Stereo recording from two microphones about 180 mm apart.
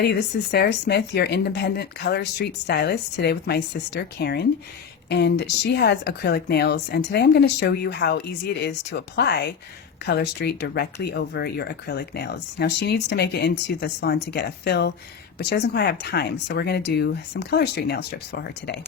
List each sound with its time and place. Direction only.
0.0 s speech: 65° left (ahead or behind)